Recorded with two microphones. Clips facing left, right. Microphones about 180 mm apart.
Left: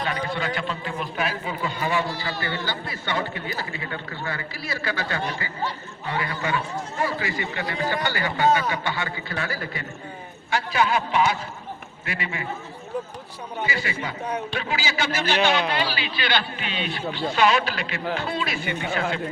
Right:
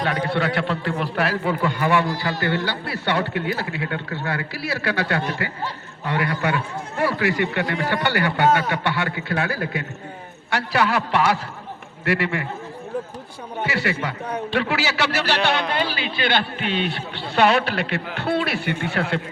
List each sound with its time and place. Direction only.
0.0 s a man's voice: 65° right (ahead or behind)
10.5 s a man's voice: 70° right (ahead or behind)
13.6 s a man's voice: 70° right (ahead or behind)
15.7 s a man's voice: 50° right (ahead or behind); by 19.2 s 65° right (ahead or behind)